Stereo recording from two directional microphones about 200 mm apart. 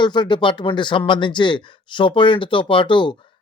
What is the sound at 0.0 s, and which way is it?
Speech, 20° left (ahead or behind).